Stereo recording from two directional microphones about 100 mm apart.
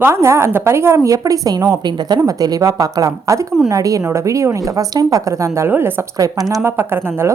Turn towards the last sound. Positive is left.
turn(degrees=-20)  # may be behind; listen again after turning